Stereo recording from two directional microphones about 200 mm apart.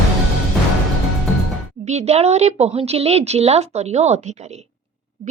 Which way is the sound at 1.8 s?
35° right (ahead or behind).